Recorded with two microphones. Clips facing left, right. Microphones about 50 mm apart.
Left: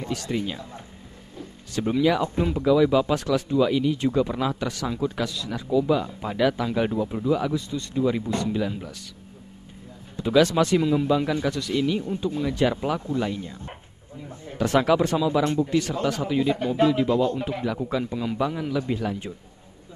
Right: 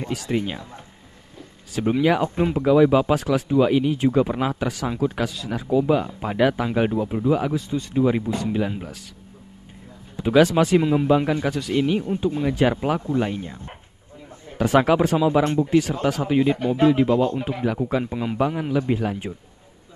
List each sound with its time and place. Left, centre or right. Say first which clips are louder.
0.1 s speech: right 3 dB; right
1.8 s speech: right 2 dB; right
3.2 s speech: right 3 dB; centre
10.1 s speech: right 2 dB; right
10.4 s speech: right 4 dB; centre
14.6 s speech: right 3 dB; centre